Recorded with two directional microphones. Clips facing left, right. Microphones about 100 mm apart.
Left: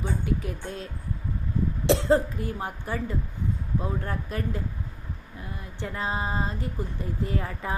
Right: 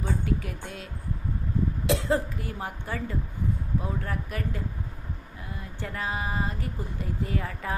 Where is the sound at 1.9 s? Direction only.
25° left (ahead or behind).